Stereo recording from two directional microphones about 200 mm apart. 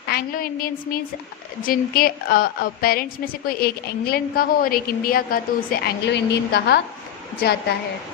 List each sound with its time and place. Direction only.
0.1 s a woman's voice: 45° left (ahead or behind)